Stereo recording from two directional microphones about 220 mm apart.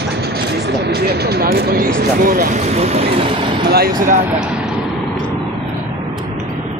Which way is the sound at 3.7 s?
40° right (ahead or behind).